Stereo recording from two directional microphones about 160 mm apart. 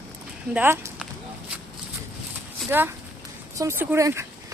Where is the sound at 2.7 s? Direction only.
15° right (ahead or behind).